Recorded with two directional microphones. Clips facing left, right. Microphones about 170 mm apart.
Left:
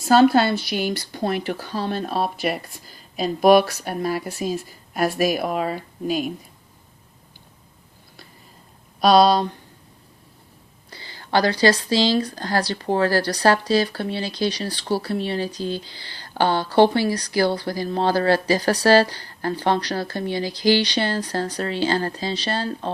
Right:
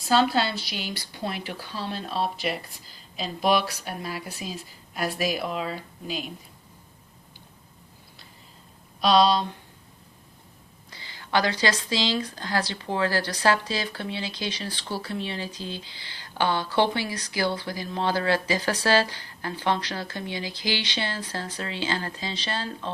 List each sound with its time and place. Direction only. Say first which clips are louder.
0.1 s speech: left 7 dB; 50° left (ahead or behind)
9.0 s speech: left 5 dB; 50° left (ahead or behind)
10.8 s speech: left 6 dB; 35° left (ahead or behind)